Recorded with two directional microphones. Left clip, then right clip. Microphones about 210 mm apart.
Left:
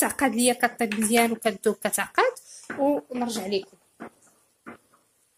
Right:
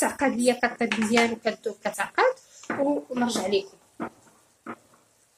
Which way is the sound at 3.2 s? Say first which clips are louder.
Right 3 dB; 40° left (ahead or behind).